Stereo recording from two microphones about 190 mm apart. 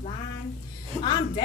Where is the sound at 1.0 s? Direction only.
25° left (ahead or behind).